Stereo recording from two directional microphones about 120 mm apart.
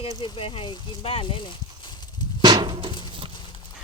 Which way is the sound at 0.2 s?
45° left (ahead or behind).